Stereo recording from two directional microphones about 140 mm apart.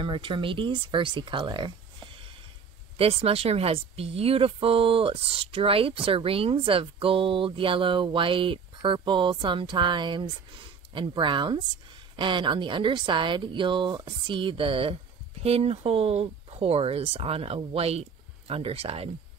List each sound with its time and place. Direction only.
0.0 s speech: 35° right (ahead or behind)
3.0 s speech: 45° right (ahead or behind)